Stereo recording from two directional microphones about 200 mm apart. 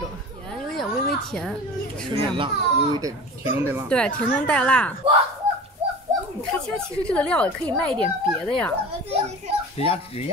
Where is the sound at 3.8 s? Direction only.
5° left (ahead or behind).